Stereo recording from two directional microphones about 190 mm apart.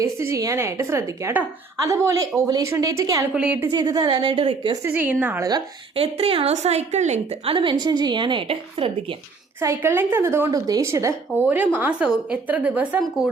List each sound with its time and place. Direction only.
0.0 s a woman's voice: 15° right (ahead or behind)
3.7 s a woman's voice: 20° right (ahead or behind)
4.9 s a woman's voice: 10° right (ahead or behind)
5.5 s a woman's voice: 25° right (ahead or behind)
9.6 s a woman's voice: 15° right (ahead or behind)